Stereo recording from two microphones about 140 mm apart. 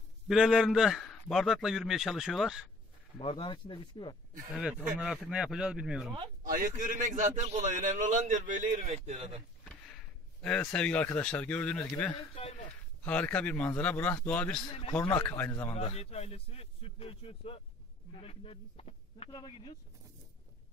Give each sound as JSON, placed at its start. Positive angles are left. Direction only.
{"t": 0.3, "sound": "a man's voice", "side_deg": -5}
{"t": 3.2, "sound": "speech", "side_deg": 40}
{"t": 4.9, "sound": "a man's voice", "side_deg": -5}
{"t": 6.4, "sound": "a man's voice", "side_deg": -80}
{"t": 6.7, "sound": "a man's voice", "side_deg": -70}
{"t": 10.4, "sound": "speech", "side_deg": 10}
{"t": 15.7, "sound": "speech", "side_deg": 50}